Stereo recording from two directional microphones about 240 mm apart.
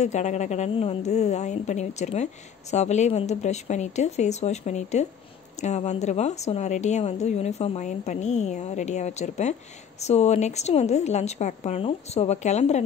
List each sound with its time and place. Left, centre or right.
0.0 s a woman's voice: left